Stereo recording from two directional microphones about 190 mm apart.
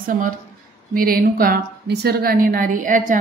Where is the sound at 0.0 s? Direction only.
45° right (ahead or behind).